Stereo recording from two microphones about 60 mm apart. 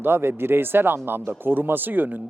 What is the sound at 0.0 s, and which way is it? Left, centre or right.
Speech, right.